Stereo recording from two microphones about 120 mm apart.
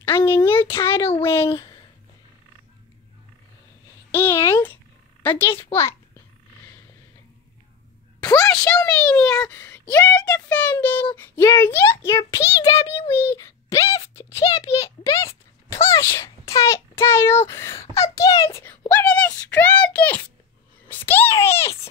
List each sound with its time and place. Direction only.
0.0 s a sound: 20° left (ahead or behind)
0.5 s a child's voice: 20° left (ahead or behind)
1.5 s speech: 45° left (ahead or behind)
4.1 s a child's voice: 20° left (ahead or behind)
8.2 s a sound: 30° left (ahead or behind)
8.5 s a child's voice: 10° left (ahead or behind); by 12.7 s 25° left (ahead or behind)
12.7 s a child's voice: 55° left (ahead or behind)
13.1 s a child's voice: 20° left (ahead or behind)
15.7 s a child's voice: 25° left (ahead or behind)